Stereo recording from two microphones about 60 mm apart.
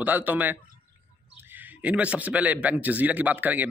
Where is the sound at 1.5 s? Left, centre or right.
Right.